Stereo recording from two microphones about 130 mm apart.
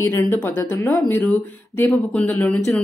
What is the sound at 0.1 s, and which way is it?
Speech, 15° left (ahead or behind).